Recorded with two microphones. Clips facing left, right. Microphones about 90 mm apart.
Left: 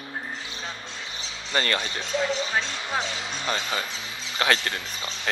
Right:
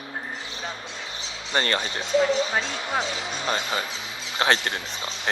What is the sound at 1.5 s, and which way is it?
Speech, 30° right (ahead or behind).